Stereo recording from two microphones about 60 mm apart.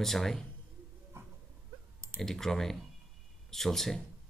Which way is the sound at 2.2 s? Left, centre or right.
Centre.